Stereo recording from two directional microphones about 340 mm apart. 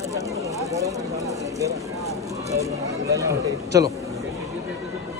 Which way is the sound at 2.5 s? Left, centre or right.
Centre.